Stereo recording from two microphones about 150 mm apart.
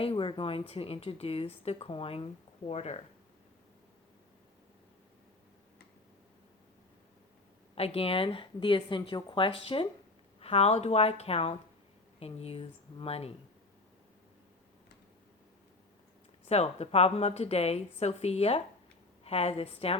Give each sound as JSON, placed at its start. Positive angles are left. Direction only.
{"t": 0.0, "sound": "speech", "side_deg": 35}
{"t": 7.8, "sound": "speech", "side_deg": 40}
{"t": 16.5, "sound": "speech", "side_deg": 45}